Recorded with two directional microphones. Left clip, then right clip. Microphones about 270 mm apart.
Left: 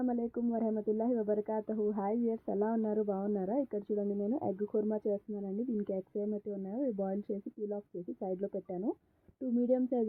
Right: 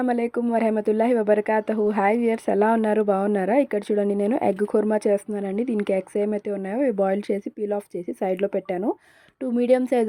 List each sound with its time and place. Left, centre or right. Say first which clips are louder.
0.0 s speech: right 12 dB; right
8.2 s speech: right 14 dB; right
9.6 s a woman's voice: right 12 dB; centre